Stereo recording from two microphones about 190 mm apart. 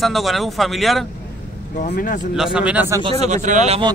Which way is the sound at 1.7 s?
45° left (ahead or behind).